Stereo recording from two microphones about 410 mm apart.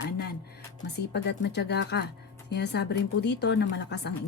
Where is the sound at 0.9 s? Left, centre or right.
Left.